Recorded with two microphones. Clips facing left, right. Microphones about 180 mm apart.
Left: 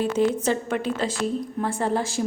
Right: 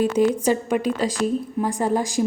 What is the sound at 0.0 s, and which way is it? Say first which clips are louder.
A woman's voice: right 3 dB; 10° right (ahead or behind).